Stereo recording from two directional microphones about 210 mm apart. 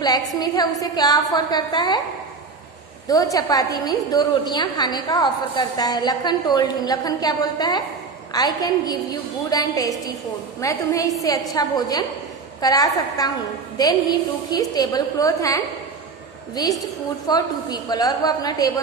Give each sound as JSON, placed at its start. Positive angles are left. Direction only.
{"t": 0.0, "sound": "a woman's voice", "side_deg": 15}
{"t": 3.1, "sound": "a woman's voice", "side_deg": 15}
{"t": 14.5, "sound": "a woman's voice", "side_deg": 20}